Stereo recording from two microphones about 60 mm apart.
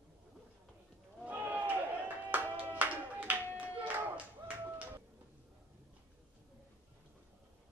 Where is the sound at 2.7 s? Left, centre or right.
Right.